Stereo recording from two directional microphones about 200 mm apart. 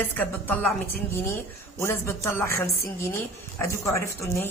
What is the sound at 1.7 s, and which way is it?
Speech, 15° left (ahead or behind).